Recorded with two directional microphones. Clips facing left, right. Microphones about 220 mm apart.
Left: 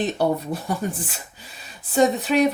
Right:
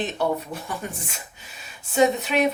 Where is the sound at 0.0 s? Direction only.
35° left (ahead or behind).